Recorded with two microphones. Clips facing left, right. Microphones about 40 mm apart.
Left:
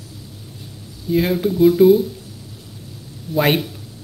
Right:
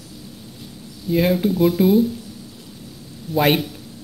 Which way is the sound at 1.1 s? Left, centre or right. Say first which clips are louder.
Even; centre.